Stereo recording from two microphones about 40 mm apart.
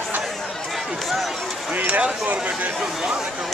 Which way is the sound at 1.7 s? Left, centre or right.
Right.